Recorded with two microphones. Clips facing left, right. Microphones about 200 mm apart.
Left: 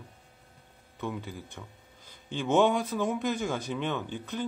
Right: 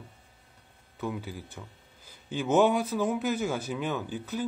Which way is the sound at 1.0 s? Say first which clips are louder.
Right 1 dB; 5° right (ahead or behind).